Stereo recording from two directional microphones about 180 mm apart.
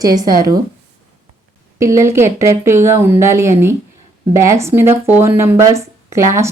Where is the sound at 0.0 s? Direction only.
20° right (ahead or behind).